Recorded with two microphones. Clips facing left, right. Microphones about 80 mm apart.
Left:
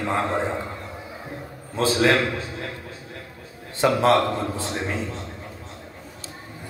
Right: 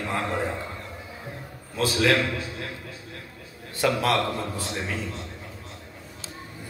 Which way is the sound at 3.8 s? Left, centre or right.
Left.